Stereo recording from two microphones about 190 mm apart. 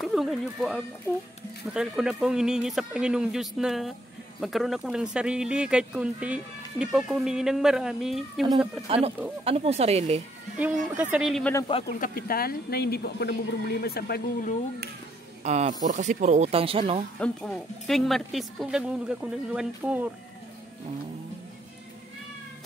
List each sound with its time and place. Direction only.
0.0 s speech: centre (ahead or behind)
8.8 s speech: 30° right (ahead or behind)
10.6 s speech: 5° right (ahead or behind)
11.5 s speech: 25° left (ahead or behind)
11.9 s a woman's voice: 50° left (ahead or behind)
15.4 s speech: 35° right (ahead or behind)
17.2 s speech: 5° left (ahead or behind)